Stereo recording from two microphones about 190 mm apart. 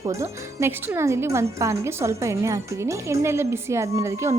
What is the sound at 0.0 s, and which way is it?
Speech, 15° right (ahead or behind).